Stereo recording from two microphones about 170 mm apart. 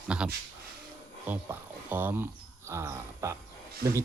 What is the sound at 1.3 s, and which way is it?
Speech, 10° right (ahead or behind).